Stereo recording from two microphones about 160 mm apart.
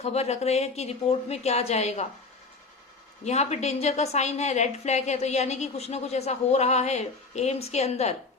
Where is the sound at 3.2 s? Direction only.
45° left (ahead or behind).